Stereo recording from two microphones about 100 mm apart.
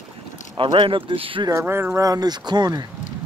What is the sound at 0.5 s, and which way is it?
Speech, 65° right (ahead or behind).